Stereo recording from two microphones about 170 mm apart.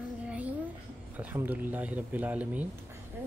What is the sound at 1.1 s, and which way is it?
Speech, 10° right (ahead or behind).